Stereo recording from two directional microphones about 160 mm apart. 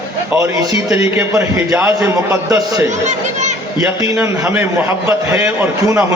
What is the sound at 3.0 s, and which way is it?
Chatter, 45° right (ahead or behind).